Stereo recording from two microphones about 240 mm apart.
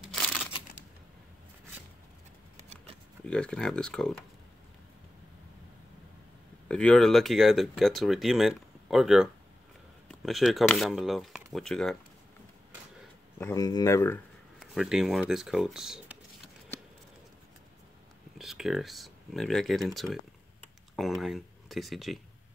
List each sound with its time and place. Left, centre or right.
0.1 s crumpling: centre
2.5 s a sound: right
3.3 s speech: centre
6.7 s speech: centre
13.4 s speech: centre
14.6 s speech: centre
18.4 s speech: centre
20.6 s a sound: centre